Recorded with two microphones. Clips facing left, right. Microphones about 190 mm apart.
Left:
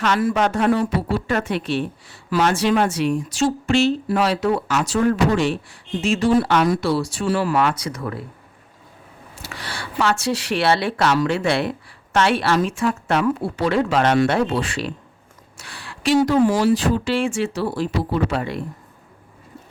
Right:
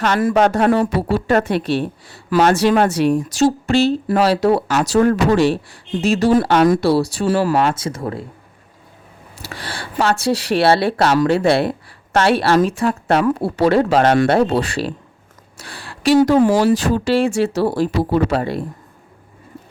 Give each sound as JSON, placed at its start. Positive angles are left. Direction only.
{"t": 0.0, "sound": "speech", "side_deg": -50}
{"t": 9.3, "sound": "speech", "side_deg": -35}